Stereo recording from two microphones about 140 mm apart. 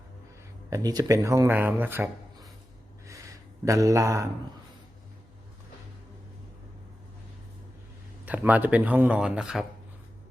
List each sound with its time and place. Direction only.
0.7 s speech: 25° right (ahead or behind)
3.7 s speech: 20° right (ahead or behind)
8.2 s speech: 10° right (ahead or behind)